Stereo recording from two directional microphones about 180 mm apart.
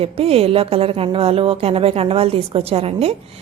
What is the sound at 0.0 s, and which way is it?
A woman's voice, 30° right (ahead or behind).